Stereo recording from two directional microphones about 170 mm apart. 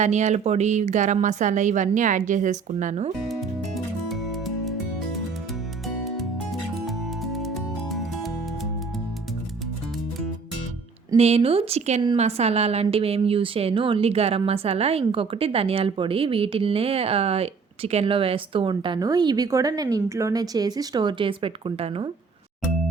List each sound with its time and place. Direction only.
0.0 s speech: 40° right (ahead or behind)
4.1 s music: centre (ahead or behind)
11.2 s a woman's voice: 35° right (ahead or behind)